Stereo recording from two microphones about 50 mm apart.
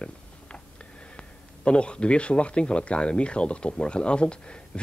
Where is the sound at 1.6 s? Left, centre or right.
Left.